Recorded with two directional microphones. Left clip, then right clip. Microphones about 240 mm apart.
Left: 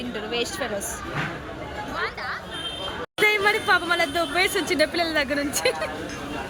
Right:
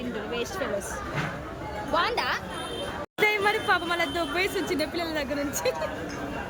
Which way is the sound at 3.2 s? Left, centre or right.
Centre.